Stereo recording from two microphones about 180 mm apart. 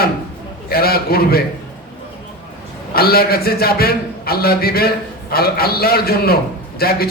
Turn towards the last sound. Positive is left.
turn(degrees=55)  # may be behind; listen again after turning